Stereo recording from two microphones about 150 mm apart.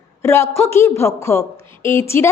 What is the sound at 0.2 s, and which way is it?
A woman's voice, 15° left (ahead or behind).